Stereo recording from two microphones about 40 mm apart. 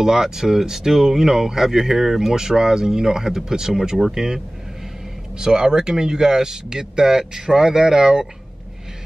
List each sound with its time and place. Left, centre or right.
0.0 s speech: centre
5.4 s speech: centre